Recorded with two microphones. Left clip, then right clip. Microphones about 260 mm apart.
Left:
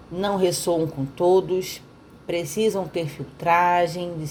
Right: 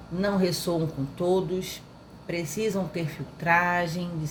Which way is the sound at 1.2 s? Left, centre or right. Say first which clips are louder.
Left 7 dB; left.